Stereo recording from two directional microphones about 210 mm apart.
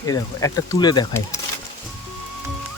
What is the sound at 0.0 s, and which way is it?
Speech, 15° left (ahead or behind).